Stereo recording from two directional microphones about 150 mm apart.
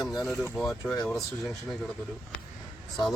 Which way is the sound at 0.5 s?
5° left (ahead or behind).